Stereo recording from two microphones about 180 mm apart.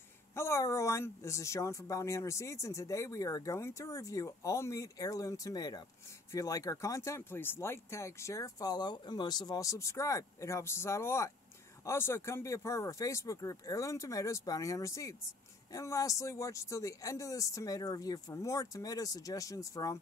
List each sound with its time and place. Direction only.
0.4 s speech: 15° left (ahead or behind)